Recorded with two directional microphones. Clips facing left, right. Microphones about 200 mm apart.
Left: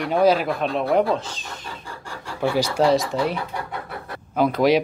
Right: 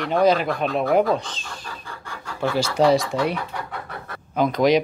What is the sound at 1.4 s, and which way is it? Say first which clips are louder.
Chicken: left 1 dB; 20° left (ahead or behind).